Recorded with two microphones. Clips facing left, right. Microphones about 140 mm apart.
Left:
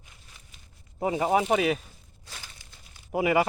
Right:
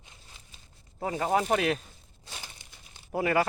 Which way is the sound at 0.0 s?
25° right (ahead or behind).